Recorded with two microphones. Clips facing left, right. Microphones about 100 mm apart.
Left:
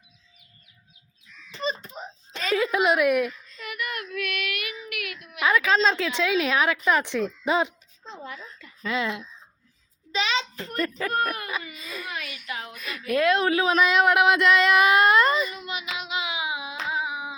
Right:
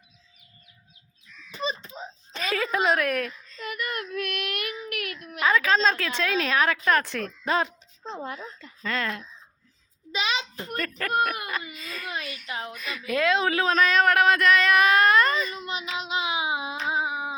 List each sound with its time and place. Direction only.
1.6 s wail: centre (ahead or behind)
2.6 s a woman's voice: 10° left (ahead or behind)
3.6 s child singing: 35° right (ahead or behind)
5.4 s speech: 15° left (ahead or behind)
8.1 s a woman's voice: 45° right (ahead or behind)
8.8 s speech: 10° left (ahead or behind)
10.1 s a sound: 15° right (ahead or behind)
11.1 s speech: 10° right (ahead or behind)
11.8 s speech: 15° left (ahead or behind)
12.5 s a woman's voice: 30° right (ahead or behind)
12.7 s speech: 5° left (ahead or behind); by 15.4 s 20° left (ahead or behind)
15.5 s hands: 30° right (ahead or behind)